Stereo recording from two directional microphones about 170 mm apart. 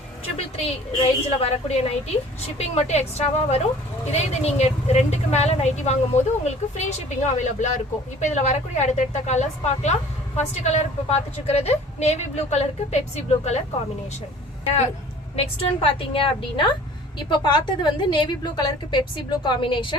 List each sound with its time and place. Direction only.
0.3 s a woman's voice: 35° left (ahead or behind)
15.4 s a woman's voice: 30° left (ahead or behind)